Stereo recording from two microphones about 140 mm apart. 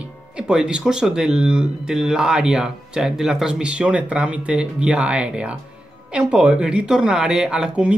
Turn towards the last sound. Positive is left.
turn(degrees=-10)  # may be behind; listen again after turning